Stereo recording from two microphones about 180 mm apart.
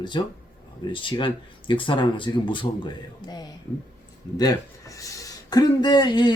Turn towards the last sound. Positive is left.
turn(degrees=25)  # may be behind; listen again after turning